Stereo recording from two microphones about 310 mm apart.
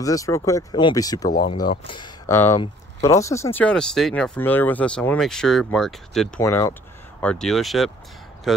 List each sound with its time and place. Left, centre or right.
0.0 s speech: centre
1.3 s speech: left
1.6 s speech: centre